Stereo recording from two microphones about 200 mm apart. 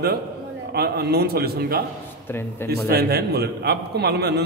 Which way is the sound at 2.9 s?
50° right (ahead or behind).